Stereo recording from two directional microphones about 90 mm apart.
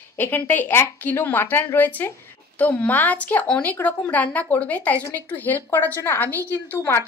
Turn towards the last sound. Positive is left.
turn(degrees=25)  # may be behind; listen again after turning